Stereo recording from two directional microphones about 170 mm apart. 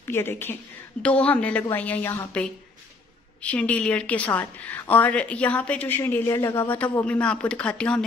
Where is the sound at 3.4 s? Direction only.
10° left (ahead or behind).